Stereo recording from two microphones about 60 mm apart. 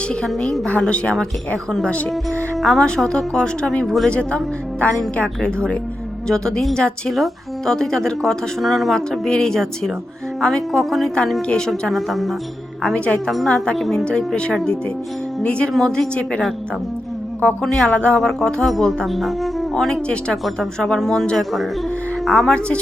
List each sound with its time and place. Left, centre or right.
0.3 s a woman's voice: centre
2.6 s speech: centre
3.8 s speech: centre
4.1 s a woman's voice: centre
11.4 s speech: centre
12.8 s speech: centre
13.3 s speech: centre
14.0 s a woman's voice: centre
15.7 s speech: centre
17.4 s a woman's voice: centre
18.2 s speech: centre
19.7 s speech: centre